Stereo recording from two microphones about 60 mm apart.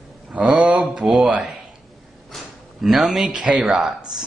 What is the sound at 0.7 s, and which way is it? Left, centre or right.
Mantra, centre.